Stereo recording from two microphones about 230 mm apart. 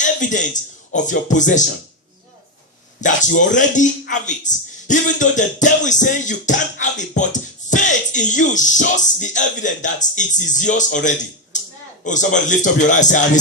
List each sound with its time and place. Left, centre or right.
0.0 s a man's voice: left
3.0 s speech: left
11.5 s a sound: left
12.0 s speech: left